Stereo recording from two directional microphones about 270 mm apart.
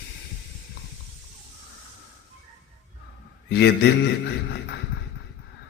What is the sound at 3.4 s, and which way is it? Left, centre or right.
Speech, left.